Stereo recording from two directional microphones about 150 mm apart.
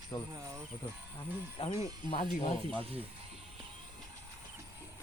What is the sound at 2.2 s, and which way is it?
Speech, 60° left (ahead or behind).